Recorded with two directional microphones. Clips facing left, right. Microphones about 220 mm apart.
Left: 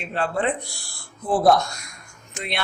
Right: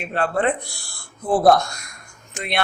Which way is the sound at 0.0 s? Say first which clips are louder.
Right 3 dB; 55° right (ahead or behind).